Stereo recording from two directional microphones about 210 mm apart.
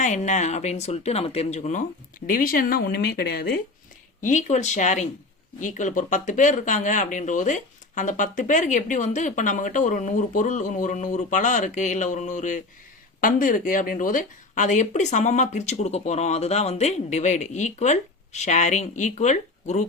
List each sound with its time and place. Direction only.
0.0 s speech: 35° left (ahead or behind)
4.2 s speech: 35° left (ahead or behind)